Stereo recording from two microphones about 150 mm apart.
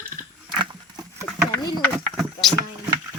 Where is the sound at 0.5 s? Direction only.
30° right (ahead or behind).